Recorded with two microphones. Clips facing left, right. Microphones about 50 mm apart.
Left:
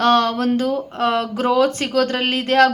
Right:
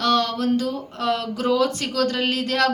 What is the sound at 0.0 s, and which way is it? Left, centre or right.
Speech, left.